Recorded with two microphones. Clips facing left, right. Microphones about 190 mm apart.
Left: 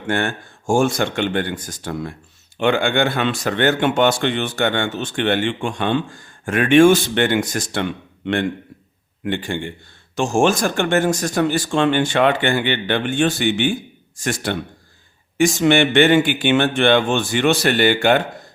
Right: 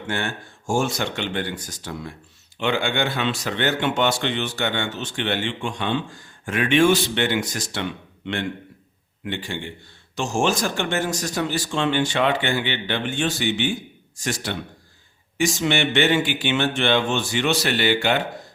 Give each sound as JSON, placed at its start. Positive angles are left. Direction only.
{"t": 0.1, "sound": "speech", "side_deg": 55}